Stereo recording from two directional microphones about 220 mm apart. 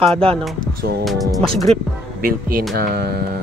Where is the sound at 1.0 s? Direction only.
Centre (ahead or behind).